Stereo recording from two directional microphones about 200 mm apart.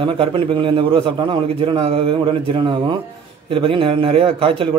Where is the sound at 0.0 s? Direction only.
25° right (ahead or behind).